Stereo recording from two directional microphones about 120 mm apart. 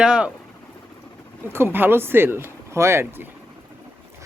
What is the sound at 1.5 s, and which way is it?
Speech, 20° right (ahead or behind).